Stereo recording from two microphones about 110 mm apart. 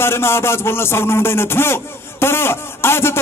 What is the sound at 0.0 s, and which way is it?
A man's voice, 20° left (ahead or behind).